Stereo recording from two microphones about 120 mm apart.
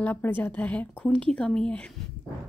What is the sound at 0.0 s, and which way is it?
Speech, 15° left (ahead or behind).